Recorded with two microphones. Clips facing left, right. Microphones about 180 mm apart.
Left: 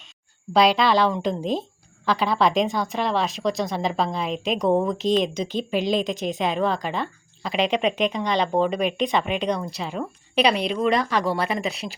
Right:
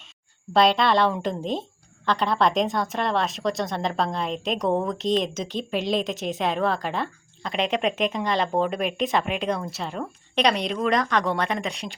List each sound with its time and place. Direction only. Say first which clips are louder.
0.5 s speech: left 1 dB; centre (ahead or behind)